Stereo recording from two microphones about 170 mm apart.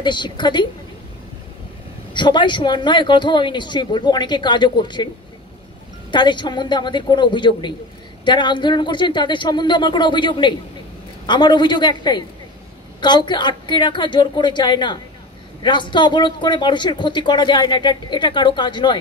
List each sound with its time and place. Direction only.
0.0 s speech: 25° left (ahead or behind)
2.1 s speech: 25° left (ahead or behind)
6.1 s speech: 25° left (ahead or behind)